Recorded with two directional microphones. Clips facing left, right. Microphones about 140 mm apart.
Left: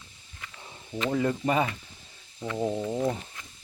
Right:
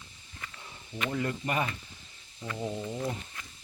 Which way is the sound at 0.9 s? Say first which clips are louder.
Left 6 dB; 25° left (ahead or behind).